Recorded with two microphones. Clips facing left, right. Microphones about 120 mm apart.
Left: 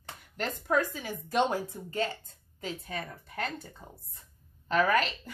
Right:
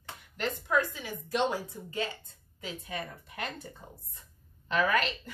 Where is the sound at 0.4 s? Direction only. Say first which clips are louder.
Left 1 dB; 45° left (ahead or behind).